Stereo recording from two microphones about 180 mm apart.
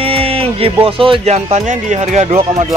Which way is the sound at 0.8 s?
30° right (ahead or behind).